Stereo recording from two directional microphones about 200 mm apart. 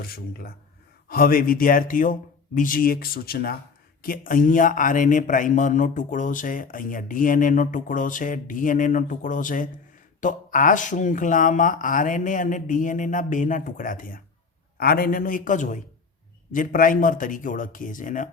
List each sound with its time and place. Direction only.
0.0 s speech: 50° left (ahead or behind)